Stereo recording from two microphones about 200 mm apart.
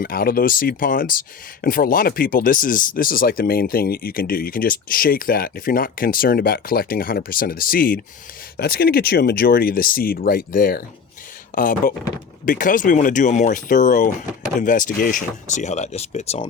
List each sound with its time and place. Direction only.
0.0 s speech: 45° left (ahead or behind); by 16.5 s 30° left (ahead or behind)